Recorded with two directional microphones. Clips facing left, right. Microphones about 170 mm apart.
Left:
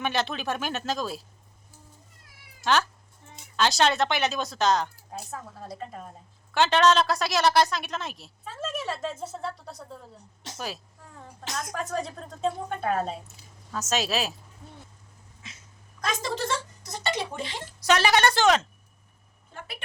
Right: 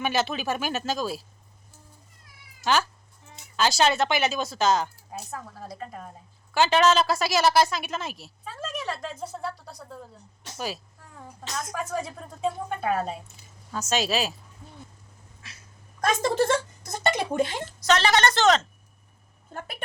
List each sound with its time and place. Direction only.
0.0 s speech: 5° right (ahead or behind)
2.6 s a woman's voice: centre (ahead or behind)
11.3 s speech: 5° right (ahead or behind)
15.4 s dog: 20° left (ahead or behind)
16.0 s a sound: 50° right (ahead or behind)
17.7 s speech: 10° left (ahead or behind)
19.5 s a woman's voice: 45° right (ahead or behind)